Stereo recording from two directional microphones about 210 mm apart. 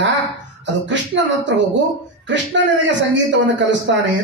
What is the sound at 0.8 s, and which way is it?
Speech, 60° right (ahead or behind).